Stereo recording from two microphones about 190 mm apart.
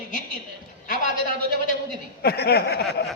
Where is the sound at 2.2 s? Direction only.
55° left (ahead or behind).